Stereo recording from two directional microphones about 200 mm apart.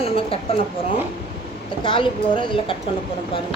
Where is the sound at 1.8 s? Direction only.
25° left (ahead or behind).